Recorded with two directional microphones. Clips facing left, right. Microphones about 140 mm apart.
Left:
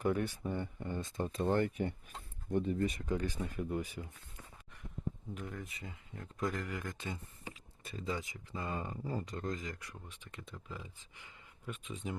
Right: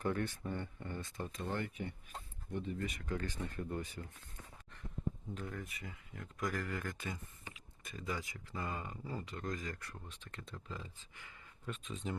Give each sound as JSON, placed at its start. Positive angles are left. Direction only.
{"t": 0.0, "sound": "speech", "side_deg": 10}
{"t": 1.4, "sound": "speech", "side_deg": 45}
{"t": 3.0, "sound": "speech", "side_deg": 20}
{"t": 5.3, "sound": "speech", "side_deg": 15}
{"t": 8.7, "sound": "speech", "side_deg": 35}
{"t": 9.5, "sound": "speech", "side_deg": 20}